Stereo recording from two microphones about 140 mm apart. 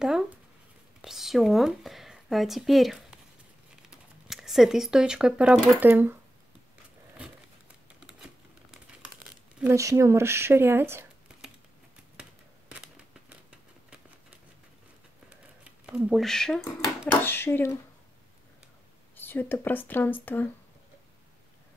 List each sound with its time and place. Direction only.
0.0 s speech: 5° right (ahead or behind)
4.3 s speech: centre (ahead or behind)
8.0 s typewriter: 5° right (ahead or behind)
9.6 s speech: 20° right (ahead or behind)
12.2 s a sound: 5° right (ahead or behind)
15.9 s speech: centre (ahead or behind)
17.1 s speech: 15° left (ahead or behind)
19.1 s speech: 15° left (ahead or behind)